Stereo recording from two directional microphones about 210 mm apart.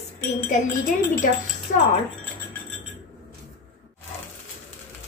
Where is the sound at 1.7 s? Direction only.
45° left (ahead or behind).